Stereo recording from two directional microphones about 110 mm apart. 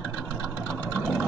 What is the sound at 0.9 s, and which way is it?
Vehicle, 5° right (ahead or behind).